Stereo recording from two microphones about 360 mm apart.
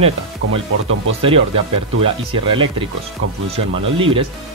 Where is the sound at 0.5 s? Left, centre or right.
Right.